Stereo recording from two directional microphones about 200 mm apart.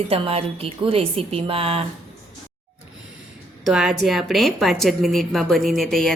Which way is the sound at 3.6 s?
Centre (ahead or behind).